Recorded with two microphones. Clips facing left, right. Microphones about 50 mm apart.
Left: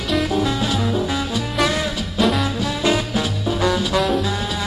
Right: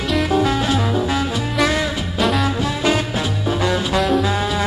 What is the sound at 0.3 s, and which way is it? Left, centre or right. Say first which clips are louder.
Music: right 3 dB; right.